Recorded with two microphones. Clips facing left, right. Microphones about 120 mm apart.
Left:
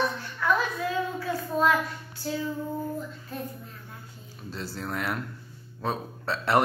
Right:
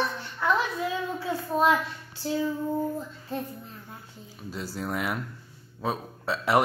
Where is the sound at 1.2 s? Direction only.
20° right (ahead or behind).